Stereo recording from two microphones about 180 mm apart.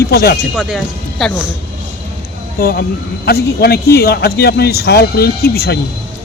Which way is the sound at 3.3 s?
65° left (ahead or behind).